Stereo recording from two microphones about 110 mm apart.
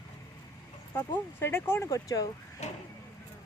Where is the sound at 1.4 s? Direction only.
20° left (ahead or behind).